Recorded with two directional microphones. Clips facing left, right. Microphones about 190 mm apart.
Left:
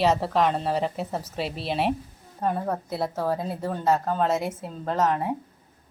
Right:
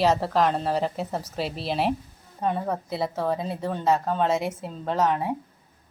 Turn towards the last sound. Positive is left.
turn(degrees=0)  # may be behind; listen again after turning